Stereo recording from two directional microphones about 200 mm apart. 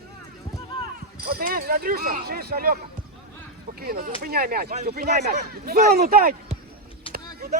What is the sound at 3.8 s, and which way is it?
Speech, 50° right (ahead or behind).